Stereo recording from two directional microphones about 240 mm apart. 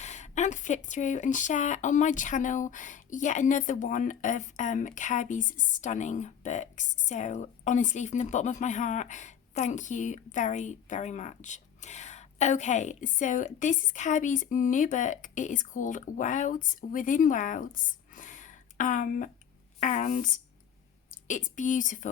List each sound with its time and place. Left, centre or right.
0.0 s a woman's voice: left